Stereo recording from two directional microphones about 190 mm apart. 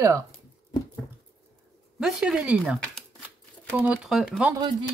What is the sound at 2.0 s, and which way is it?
Speech, centre (ahead or behind).